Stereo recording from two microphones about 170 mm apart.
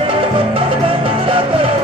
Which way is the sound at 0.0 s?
30° right (ahead or behind).